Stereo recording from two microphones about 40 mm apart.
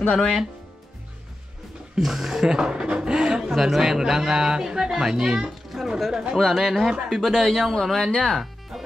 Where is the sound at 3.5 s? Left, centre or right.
Centre.